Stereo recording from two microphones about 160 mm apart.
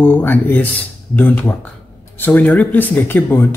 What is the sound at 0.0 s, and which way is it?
Speech, 10° left (ahead or behind).